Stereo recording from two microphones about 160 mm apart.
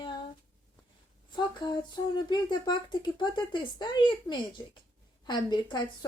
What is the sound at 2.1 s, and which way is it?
Speech, 25° left (ahead or behind).